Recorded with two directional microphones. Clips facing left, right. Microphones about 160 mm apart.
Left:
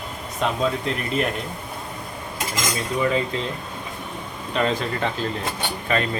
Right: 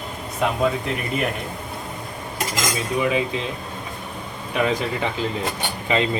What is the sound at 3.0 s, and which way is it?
Speech, 10° right (ahead or behind).